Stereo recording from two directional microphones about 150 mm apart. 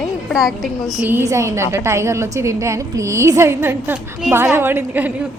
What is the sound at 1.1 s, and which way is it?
A woman's voice, 20° right (ahead or behind).